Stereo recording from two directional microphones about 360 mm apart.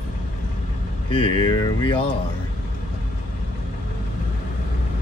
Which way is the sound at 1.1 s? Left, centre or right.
Centre.